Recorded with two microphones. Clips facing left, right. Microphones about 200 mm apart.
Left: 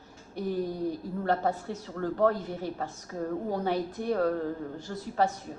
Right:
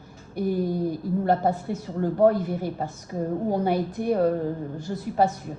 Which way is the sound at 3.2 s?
35° right (ahead or behind).